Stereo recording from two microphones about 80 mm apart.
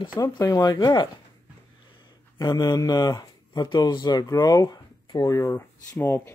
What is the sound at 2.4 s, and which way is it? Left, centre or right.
Speech, left.